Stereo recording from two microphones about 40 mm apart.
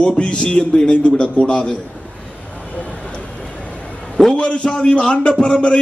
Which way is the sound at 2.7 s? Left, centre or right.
Left.